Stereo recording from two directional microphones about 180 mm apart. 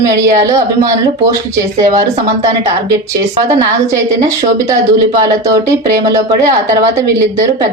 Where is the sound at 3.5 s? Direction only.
20° right (ahead or behind).